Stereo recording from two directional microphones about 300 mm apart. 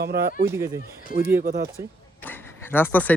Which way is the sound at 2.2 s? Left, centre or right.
Centre.